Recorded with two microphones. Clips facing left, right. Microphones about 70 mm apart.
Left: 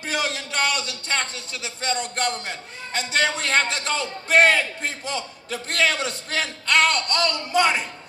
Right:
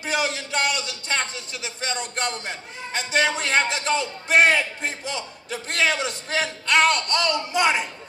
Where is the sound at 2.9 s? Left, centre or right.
Centre.